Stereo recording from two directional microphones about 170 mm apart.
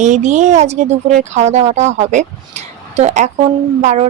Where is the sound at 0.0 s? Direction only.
45° right (ahead or behind).